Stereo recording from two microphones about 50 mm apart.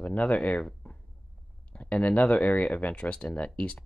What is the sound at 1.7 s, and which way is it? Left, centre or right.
Speech, left.